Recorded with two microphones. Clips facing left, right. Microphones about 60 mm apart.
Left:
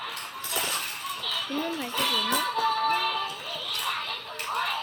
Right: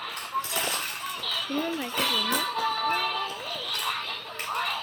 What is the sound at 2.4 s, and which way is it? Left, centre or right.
Music, centre.